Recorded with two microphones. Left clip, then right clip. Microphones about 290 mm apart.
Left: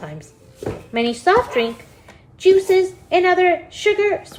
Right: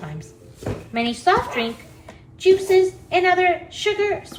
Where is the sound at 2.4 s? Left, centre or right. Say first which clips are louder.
Left 2 dB; left.